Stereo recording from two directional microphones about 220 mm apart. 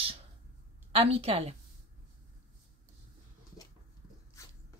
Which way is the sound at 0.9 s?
25° right (ahead or behind).